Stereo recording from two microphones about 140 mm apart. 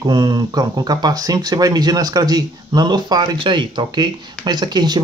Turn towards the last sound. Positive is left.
turn(degrees=-30)  # may be behind; listen again after turning